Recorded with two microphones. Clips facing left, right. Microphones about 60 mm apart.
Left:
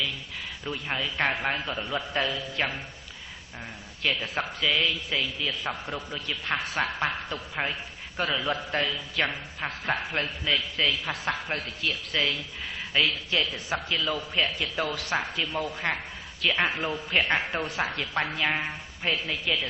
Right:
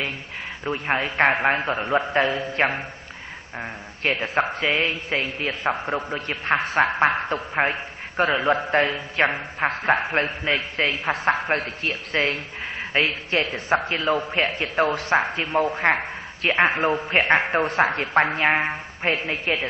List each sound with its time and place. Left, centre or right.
0.7 s a man's voice: right